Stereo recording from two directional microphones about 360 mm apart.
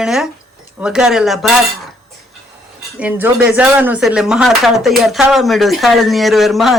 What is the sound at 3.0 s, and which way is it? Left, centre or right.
Speech, centre.